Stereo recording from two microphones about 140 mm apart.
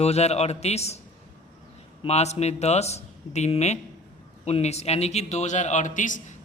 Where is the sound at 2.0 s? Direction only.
50° left (ahead or behind).